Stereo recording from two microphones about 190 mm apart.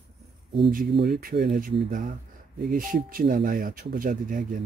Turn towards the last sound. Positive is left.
turn(degrees=-45)  # may be behind; listen again after turning